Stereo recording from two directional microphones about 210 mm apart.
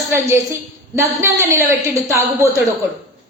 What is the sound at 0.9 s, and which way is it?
Speech, 10° right (ahead or behind).